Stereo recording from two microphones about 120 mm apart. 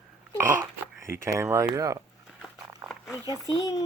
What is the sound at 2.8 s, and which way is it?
Dog, 30° right (ahead or behind).